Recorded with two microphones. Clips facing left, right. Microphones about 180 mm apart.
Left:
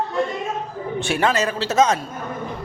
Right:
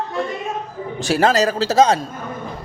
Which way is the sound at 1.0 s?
35° right (ahead or behind).